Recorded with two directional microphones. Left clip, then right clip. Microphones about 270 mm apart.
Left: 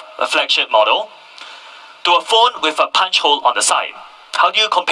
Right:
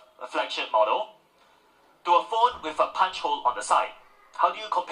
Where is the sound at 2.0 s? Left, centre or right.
Left.